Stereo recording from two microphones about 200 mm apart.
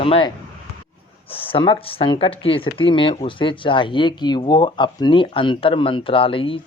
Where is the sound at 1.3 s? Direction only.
25° left (ahead or behind).